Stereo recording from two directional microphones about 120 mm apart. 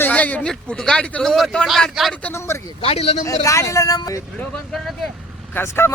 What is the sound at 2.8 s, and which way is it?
Speech, 60° left (ahead or behind).